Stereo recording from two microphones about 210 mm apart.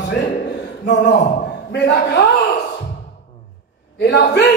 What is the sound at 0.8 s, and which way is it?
Speech, 55° left (ahead or behind).